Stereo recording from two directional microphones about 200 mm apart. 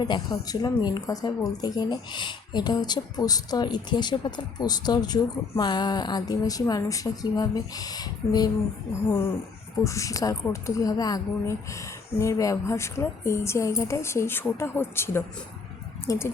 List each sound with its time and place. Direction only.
0.0 s speech: 20° left (ahead or behind)